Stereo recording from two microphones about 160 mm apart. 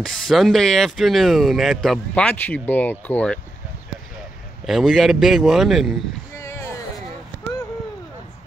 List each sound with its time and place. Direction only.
0.0 s speech: centre (ahead or behind)
4.6 s speech: centre (ahead or behind)
6.3 s a sound: 20° left (ahead or behind)